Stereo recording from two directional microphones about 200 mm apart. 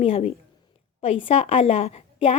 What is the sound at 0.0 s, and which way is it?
A woman's voice, 30° left (ahead or behind).